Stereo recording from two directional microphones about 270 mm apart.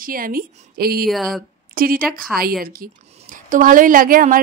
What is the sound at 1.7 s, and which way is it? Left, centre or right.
A woman's voice, right.